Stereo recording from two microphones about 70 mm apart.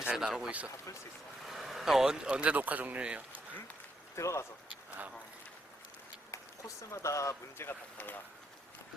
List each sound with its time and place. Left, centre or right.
0.0 s speech: centre
4.1 s speech: left
6.3 s speech: left
7.7 s speech: left